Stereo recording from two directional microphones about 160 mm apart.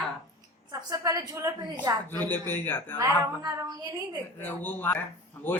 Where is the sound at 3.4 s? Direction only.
25° right (ahead or behind).